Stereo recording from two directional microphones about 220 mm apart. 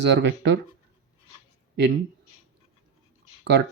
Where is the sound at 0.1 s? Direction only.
50° right (ahead or behind).